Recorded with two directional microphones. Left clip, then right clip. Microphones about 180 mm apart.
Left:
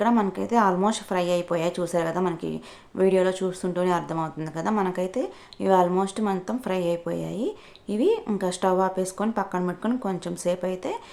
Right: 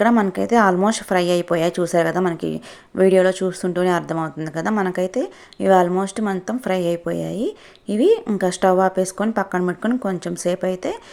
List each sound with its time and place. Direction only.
0.0 s a woman's voice: 30° right (ahead or behind)